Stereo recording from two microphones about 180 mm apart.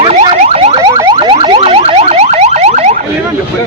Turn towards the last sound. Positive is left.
turn(degrees=-40)  # may be behind; listen again after turning